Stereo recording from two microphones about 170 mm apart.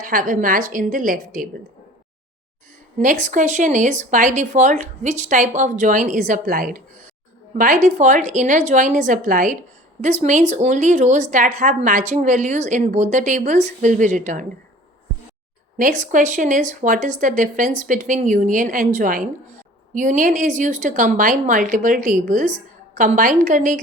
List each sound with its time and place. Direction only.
0.0 s a woman's voice: 55° right (ahead or behind)
3.0 s a woman's voice: 45° right (ahead or behind)
15.8 s a woman's voice: 50° right (ahead or behind)